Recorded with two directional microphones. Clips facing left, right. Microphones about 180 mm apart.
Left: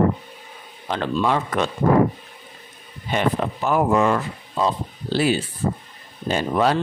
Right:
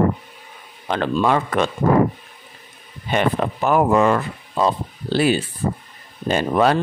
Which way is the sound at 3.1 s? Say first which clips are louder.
Right 2 dB; 60° right (ahead or behind).